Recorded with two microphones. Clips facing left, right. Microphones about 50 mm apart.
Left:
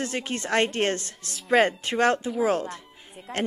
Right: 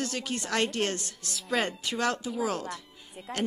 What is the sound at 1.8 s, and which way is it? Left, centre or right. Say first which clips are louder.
A woman's voice: left 7 dB; left.